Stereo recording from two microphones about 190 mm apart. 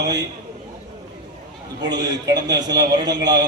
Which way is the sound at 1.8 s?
20° right (ahead or behind).